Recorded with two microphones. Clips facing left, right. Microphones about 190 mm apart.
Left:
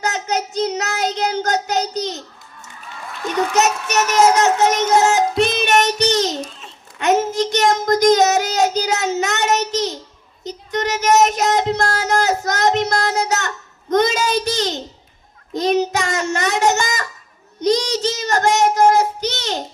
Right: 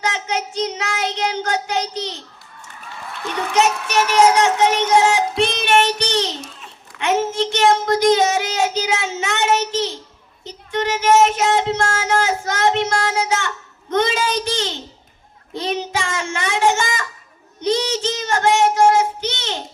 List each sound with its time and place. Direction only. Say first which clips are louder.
0.0 s child singing: left 2 dB; 40° left (ahead or behind)
3.5 s child singing: right 4 dB; 40° left (ahead or behind)
13.9 s a sound: left 2 dB; 40° left (ahead or behind)
17.6 s child singing: left 2 dB; 40° left (ahead or behind)